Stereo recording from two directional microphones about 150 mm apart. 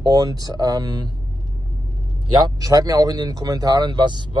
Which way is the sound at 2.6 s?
25° right (ahead or behind).